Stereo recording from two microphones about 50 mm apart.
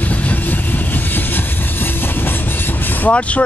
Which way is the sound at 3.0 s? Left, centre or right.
Left.